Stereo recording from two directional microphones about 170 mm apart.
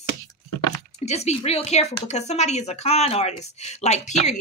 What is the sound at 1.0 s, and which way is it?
Speech, 40° left (ahead or behind).